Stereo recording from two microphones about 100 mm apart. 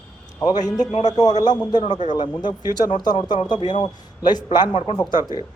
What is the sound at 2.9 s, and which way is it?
Speech, 45° left (ahead or behind).